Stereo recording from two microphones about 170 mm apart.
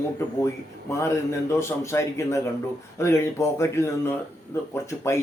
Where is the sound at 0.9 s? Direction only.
15° left (ahead or behind).